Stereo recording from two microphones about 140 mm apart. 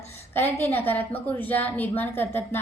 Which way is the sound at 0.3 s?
15° left (ahead or behind).